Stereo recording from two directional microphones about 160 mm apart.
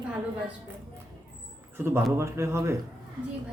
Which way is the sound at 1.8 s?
15° right (ahead or behind).